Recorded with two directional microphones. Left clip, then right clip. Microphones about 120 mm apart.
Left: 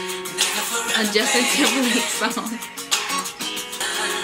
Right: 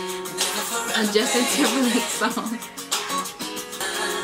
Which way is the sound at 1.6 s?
15° left (ahead or behind).